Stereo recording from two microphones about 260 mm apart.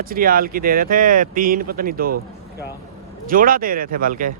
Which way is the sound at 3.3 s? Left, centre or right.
Right.